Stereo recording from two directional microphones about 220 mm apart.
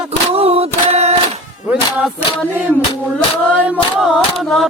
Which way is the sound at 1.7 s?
5° right (ahead or behind).